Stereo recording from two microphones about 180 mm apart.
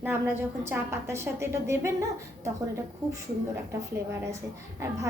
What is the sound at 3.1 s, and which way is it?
Speech, 15° right (ahead or behind).